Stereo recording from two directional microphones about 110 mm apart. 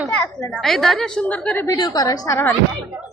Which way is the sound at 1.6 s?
35° left (ahead or behind).